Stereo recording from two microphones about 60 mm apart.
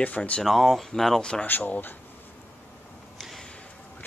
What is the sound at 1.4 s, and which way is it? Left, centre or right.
Speech, left.